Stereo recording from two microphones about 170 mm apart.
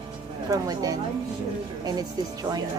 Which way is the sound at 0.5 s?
20° right (ahead or behind).